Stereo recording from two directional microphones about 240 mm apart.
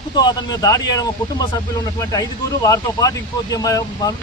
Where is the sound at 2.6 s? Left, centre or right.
Centre.